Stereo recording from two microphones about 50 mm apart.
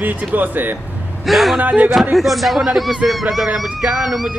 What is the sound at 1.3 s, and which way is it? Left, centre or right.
Speech, centre.